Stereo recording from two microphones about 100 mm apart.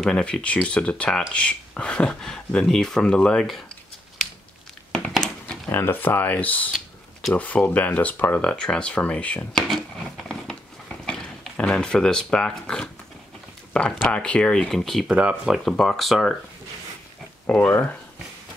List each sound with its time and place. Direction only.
0.1 s speech: 10° left (ahead or behind)
4.9 s a sound: 5° left (ahead or behind)
5.7 s speech: 20° left (ahead or behind)
14.0 s speech: 10° left (ahead or behind); by 15.6 s 5° right (ahead or behind)
15.6 s speech: 5° left (ahead or behind)
17.5 s speech: 20° left (ahead or behind)